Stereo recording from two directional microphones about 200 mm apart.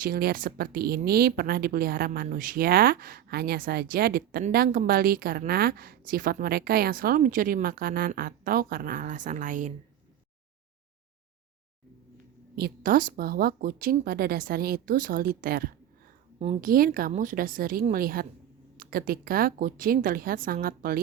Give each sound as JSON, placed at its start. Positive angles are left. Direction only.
{"t": 0.0, "sound": "speech", "side_deg": -50}
{"t": 12.5, "sound": "speech", "side_deg": -45}